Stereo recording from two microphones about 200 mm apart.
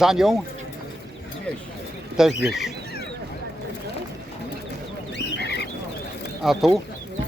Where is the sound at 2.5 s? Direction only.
Centre (ahead or behind).